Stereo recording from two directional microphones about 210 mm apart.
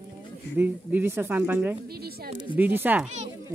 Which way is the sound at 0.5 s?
10° right (ahead or behind).